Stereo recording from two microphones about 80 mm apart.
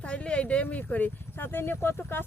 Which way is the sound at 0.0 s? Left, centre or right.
Centre.